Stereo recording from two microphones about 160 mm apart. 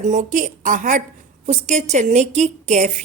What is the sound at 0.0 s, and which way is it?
A woman's voice, 50° right (ahead or behind).